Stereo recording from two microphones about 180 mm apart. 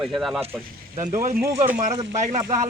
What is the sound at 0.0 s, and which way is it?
Speech, centre (ahead or behind).